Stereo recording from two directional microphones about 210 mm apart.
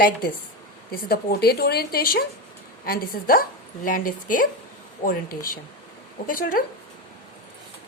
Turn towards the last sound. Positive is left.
turn(degrees=40)  # may be behind; listen again after turning